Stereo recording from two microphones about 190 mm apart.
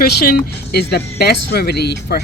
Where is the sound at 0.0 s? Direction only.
55° left (ahead or behind).